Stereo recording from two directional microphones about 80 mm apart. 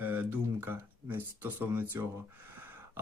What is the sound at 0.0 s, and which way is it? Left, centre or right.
Speech, right.